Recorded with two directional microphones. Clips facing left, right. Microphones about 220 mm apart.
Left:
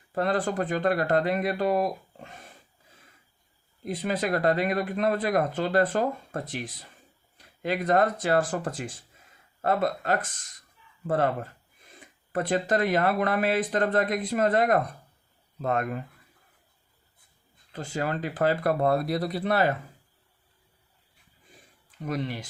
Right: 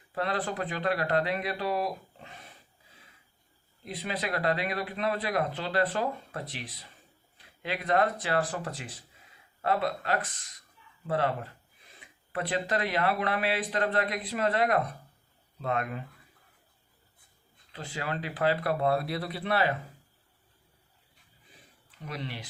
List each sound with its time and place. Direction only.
0.1 s speech: 45° left (ahead or behind)
3.8 s speech: 45° left (ahead or behind)
17.7 s speech: 45° left (ahead or behind)
22.0 s speech: 45° left (ahead or behind)